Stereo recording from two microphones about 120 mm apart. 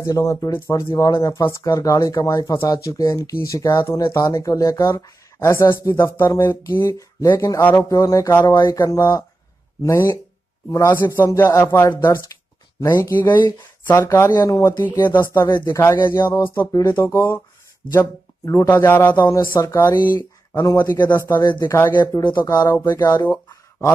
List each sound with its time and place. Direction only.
0.0 s speech: 25° left (ahead or behind)
13.3 s speech: 35° left (ahead or behind)
13.8 s speech: 20° left (ahead or behind)
15.0 s a man's voice: 15° left (ahead or behind)
19.2 s speech: 35° left (ahead or behind)
19.9 s speech: 35° left (ahead or behind)
21.3 s speech: 35° left (ahead or behind)
23.3 s a sound: 25° left (ahead or behind)